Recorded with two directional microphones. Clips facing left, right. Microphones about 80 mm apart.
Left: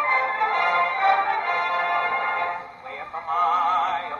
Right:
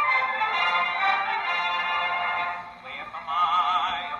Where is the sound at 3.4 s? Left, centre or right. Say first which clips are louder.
Left 2 dB; left.